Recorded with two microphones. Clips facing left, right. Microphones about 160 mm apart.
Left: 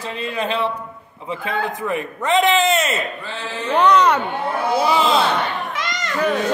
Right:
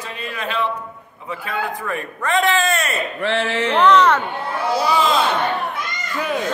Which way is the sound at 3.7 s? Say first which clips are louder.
Even; 15° left (ahead or behind).